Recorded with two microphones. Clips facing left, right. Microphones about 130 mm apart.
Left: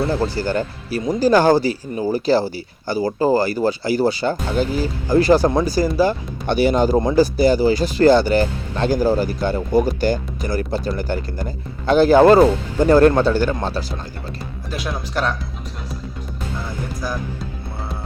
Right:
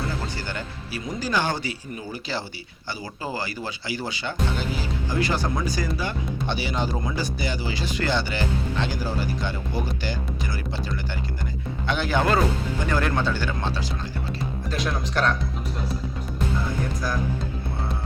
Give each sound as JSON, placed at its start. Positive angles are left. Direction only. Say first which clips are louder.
{"t": 0.3, "sound": "speech", "louder": "left 11 dB", "side_deg": 40}
{"t": 6.5, "sound": "speech", "louder": "left 13 dB", "side_deg": 50}
{"t": 7.0, "sound": "speech", "louder": "left 13 dB", "side_deg": 40}
{"t": 14.7, "sound": "speech", "louder": "left 2 dB", "side_deg": 10}